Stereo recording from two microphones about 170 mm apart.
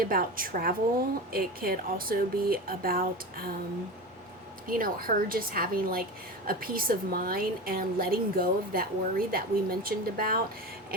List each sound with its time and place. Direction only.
0.0 s a woman's voice: 60° right (ahead or behind)
4.7 s a woman's voice: 60° right (ahead or behind)